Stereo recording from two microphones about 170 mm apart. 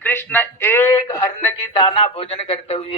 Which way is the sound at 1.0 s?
30° left (ahead or behind).